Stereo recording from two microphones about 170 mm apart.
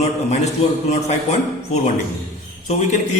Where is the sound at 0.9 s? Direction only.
40° left (ahead or behind).